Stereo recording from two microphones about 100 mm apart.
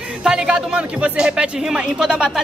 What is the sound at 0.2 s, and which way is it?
Speech, 5° right (ahead or behind).